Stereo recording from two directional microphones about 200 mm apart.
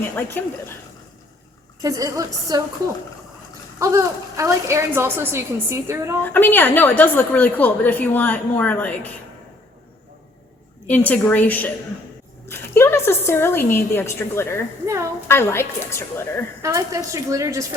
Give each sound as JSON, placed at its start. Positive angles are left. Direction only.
{"t": 0.2, "sound": "a woman's voice", "side_deg": 10}
{"t": 1.8, "sound": "a woman's voice", "side_deg": -15}
{"t": 3.8, "sound": "a woman's voice", "side_deg": -15}
{"t": 6.2, "sound": "a woman's voice", "side_deg": 10}
{"t": 10.8, "sound": "a woman's voice", "side_deg": 10}
{"t": 16.6, "sound": "a woman's voice", "side_deg": -15}